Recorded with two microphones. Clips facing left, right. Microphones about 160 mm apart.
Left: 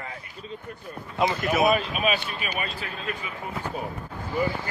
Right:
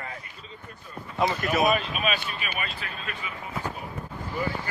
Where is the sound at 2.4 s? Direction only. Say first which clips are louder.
Left 3 dB; 40° left (ahead or behind).